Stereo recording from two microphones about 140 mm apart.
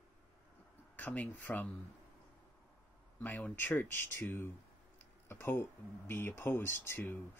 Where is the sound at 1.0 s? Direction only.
10° left (ahead or behind).